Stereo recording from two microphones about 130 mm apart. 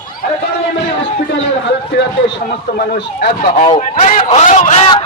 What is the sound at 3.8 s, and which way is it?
A man's voice, 75° left (ahead or behind).